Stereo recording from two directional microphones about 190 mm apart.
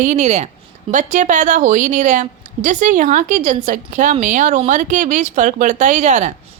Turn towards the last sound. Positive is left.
turn(degrees=-40)  # may be behind; listen again after turning